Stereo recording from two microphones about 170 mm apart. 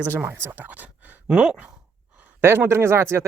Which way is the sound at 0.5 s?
10° right (ahead or behind).